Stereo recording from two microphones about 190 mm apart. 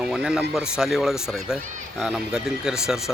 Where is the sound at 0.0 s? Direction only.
5° right (ahead or behind).